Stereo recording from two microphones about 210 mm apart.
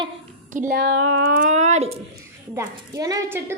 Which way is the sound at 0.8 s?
65° right (ahead or behind).